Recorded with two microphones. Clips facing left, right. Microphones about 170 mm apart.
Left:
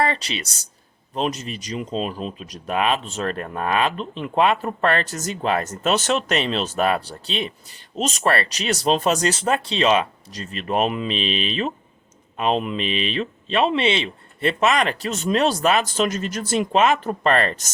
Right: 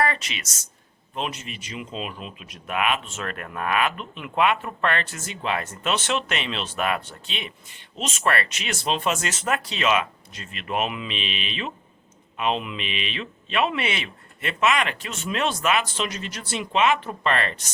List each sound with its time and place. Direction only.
0.0 s speech: 30° left (ahead or behind)